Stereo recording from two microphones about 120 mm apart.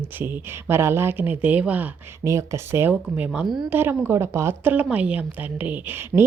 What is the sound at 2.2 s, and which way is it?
A woman's voice, 25° right (ahead or behind).